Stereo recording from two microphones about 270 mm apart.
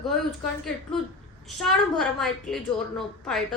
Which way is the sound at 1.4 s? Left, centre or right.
Centre.